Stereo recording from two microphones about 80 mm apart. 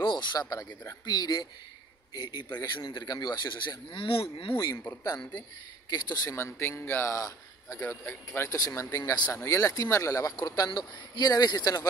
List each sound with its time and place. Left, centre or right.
0.0 s speech: left
3.6 s speech: left
4.6 s speech: left
6.3 s speech: left
7.8 s speech: left
8.3 s speech: left